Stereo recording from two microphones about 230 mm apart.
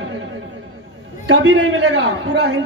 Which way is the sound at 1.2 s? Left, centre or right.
Right.